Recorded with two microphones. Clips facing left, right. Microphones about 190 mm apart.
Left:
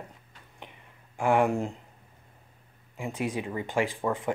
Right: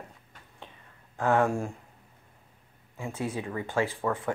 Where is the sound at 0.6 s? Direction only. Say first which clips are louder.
Left 1 dB; 15° left (ahead or behind).